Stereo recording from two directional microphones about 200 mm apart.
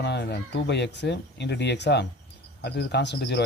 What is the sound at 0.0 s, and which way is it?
Speech, 55° left (ahead or behind).